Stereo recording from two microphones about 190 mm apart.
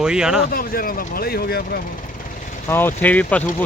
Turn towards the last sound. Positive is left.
turn(degrees=5)  # may be behind; listen again after turning